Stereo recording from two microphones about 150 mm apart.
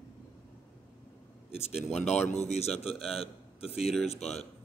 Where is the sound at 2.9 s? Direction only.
Centre (ahead or behind).